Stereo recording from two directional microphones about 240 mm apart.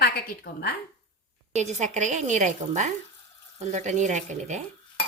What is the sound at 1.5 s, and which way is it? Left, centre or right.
A woman's voice, right.